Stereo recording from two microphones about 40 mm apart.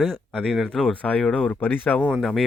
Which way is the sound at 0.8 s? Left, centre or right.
Left.